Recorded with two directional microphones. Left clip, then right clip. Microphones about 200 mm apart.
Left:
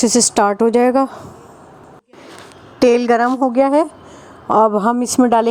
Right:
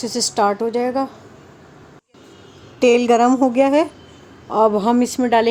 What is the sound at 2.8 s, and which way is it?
Speech, 20° left (ahead or behind).